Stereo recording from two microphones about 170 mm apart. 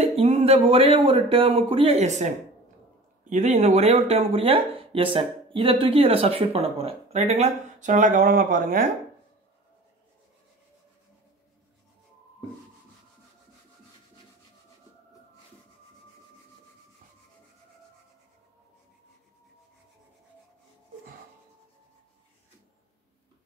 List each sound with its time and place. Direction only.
0.2 s speech: 40° right (ahead or behind)
3.3 s speech: 45° right (ahead or behind)